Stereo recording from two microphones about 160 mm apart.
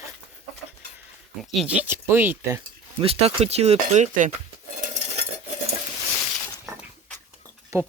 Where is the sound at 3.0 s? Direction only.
40° right (ahead or behind); by 4.3 s 55° right (ahead or behind).